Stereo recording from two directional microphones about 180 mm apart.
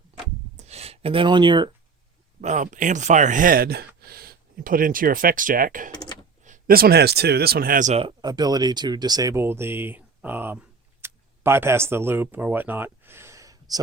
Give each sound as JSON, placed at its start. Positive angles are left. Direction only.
{"t": 0.5, "sound": "a sound", "side_deg": -35}
{"t": 2.4, "sound": "speech", "side_deg": -45}
{"t": 8.0, "sound": "speech", "side_deg": -25}